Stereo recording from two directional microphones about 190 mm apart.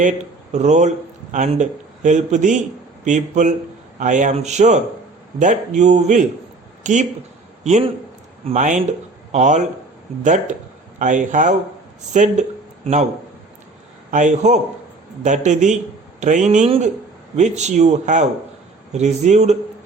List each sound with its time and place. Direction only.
0.5 s a man's voice: 40° right (ahead or behind)
14.1 s a man's voice: 40° right (ahead or behind)